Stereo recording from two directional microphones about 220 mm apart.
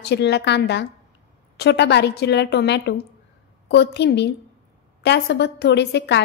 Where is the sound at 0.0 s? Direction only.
50° left (ahead or behind).